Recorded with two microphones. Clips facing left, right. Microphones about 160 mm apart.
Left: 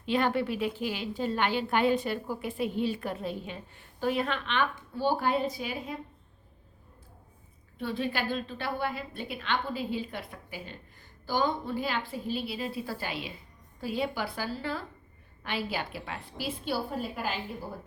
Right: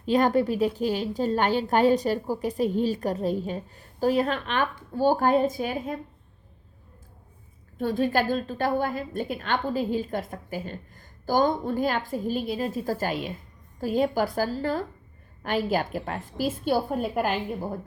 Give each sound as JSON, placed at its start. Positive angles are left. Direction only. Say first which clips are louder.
{"t": 0.0, "sound": "a woman's voice", "louder": "right 6 dB", "side_deg": -40}
{"t": 7.8, "sound": "a woman's voice", "louder": "right 8 dB", "side_deg": -45}